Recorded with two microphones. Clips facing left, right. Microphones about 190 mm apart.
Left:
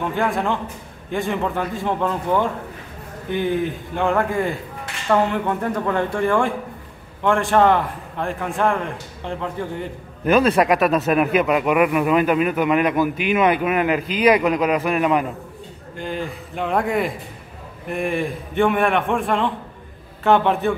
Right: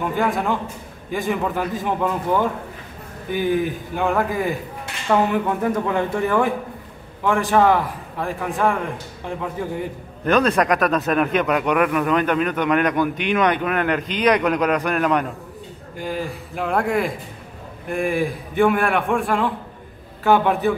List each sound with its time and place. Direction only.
0.0 s speech: 5° right (ahead or behind)
10.2 s speech: 5° left (ahead or behind)